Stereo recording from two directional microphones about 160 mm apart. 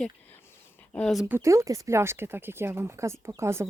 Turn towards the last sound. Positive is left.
turn(degrees=-15)  # may be behind; listen again after turning